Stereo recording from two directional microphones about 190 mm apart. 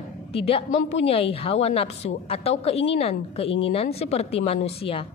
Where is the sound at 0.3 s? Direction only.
30° left (ahead or behind).